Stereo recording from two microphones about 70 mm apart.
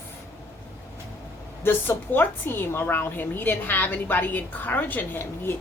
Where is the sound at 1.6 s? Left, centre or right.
Left.